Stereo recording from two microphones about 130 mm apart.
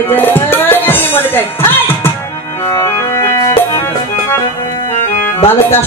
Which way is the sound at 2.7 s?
20° left (ahead or behind).